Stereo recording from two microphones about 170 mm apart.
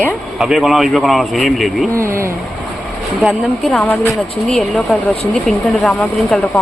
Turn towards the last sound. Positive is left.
turn(degrees=0)  # may be behind; listen again after turning